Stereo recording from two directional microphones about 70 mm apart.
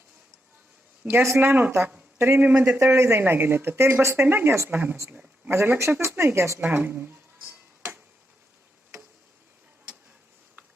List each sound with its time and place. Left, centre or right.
1.1 s speech: right
2.7 s speech: right
6.6 s speech: right